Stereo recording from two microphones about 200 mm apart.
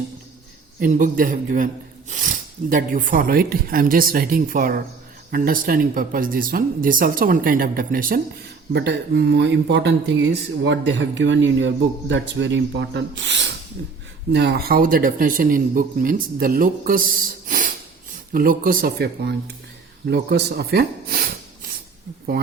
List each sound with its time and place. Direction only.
0.8 s speech: 40° right (ahead or behind)
8.7 s speech: 60° right (ahead or behind)